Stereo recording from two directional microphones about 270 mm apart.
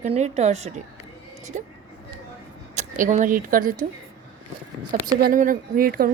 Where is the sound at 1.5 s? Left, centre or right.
Right.